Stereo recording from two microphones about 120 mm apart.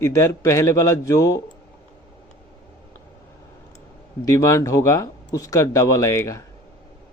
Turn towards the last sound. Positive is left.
turn(degrees=25)  # may be behind; listen again after turning